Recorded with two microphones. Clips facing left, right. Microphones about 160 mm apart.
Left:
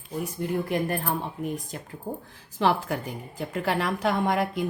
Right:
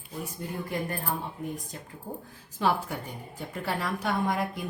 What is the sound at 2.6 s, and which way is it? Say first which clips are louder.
A woman's voice: left 3 dB; 75° left (ahead or behind).